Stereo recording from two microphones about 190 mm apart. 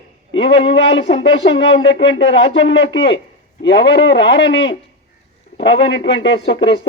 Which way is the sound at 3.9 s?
70° left (ahead or behind).